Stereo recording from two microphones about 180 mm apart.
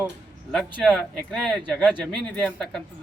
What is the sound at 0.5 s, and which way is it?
A man's voice, centre (ahead or behind).